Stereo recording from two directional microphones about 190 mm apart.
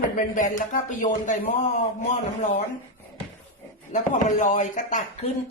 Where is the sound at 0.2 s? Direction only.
45° left (ahead or behind).